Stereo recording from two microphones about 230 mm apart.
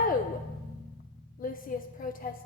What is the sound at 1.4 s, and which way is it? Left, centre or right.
Speech, left.